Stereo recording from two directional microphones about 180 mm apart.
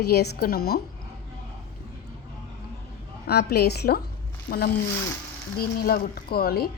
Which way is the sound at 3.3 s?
65° left (ahead or behind).